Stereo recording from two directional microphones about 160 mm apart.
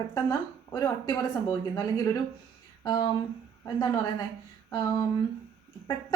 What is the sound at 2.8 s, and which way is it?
A woman's voice, 25° left (ahead or behind).